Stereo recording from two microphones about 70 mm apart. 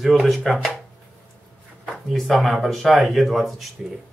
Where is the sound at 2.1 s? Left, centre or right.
Centre.